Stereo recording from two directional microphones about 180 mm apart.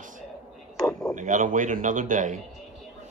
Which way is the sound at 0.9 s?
5° left (ahead or behind).